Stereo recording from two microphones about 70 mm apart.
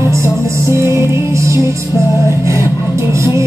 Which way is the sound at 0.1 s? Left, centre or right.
Right.